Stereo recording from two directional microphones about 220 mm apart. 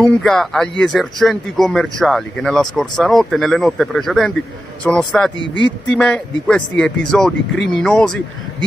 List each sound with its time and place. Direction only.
0.0 s speech: centre (ahead or behind)